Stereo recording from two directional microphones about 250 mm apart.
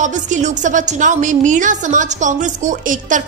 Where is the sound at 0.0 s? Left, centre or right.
Right.